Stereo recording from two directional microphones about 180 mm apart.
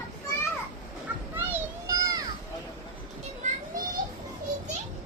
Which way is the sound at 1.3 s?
15° right (ahead or behind).